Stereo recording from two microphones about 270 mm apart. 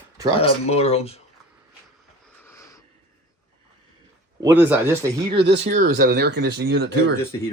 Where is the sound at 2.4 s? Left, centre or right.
Centre.